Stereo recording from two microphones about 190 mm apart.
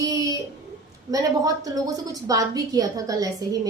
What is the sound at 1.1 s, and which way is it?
A woman's voice, 20° right (ahead or behind).